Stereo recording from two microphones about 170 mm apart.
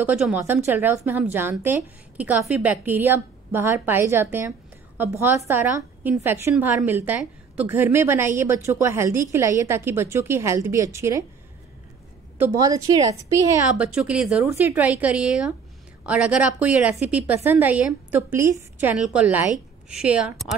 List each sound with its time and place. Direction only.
0.0 s a woman's voice: 10° right (ahead or behind)
12.4 s a woman's voice: 20° right (ahead or behind)
13.7 s a woman's voice: 5° right (ahead or behind)
14.4 s a woman's voice: 15° right (ahead or behind)